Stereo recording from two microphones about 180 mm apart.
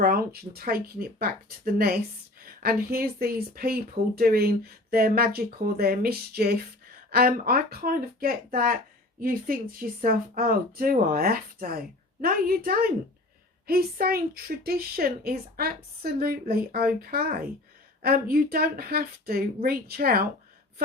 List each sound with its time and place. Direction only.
0.5 s a woman's voice: 55° right (ahead or behind)